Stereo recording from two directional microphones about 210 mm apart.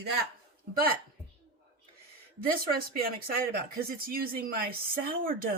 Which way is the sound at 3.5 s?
45° right (ahead or behind).